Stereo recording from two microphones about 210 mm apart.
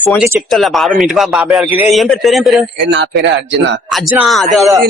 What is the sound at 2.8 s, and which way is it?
Speech, 55° right (ahead or behind).